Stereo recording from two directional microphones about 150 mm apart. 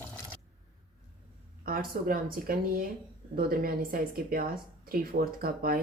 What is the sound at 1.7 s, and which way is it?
Speech, 75° right (ahead or behind).